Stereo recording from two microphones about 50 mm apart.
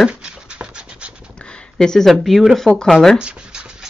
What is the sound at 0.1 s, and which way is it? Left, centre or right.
Scratch, right.